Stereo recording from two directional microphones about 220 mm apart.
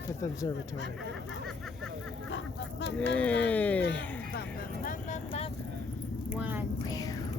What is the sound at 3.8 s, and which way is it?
Music, 50° left (ahead or behind).